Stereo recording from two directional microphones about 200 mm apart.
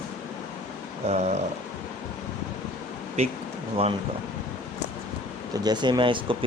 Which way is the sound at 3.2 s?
30° right (ahead or behind).